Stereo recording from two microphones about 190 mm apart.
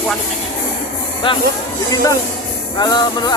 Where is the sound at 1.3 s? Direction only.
30° left (ahead or behind).